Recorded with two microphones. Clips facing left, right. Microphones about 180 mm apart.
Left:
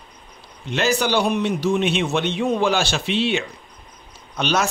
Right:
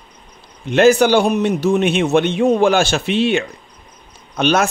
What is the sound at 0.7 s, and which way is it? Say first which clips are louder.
Speech: right 9 dB; 50° right (ahead or behind).